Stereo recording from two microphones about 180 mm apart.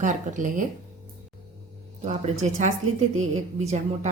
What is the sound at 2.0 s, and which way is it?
A woman's voice, 40° right (ahead or behind).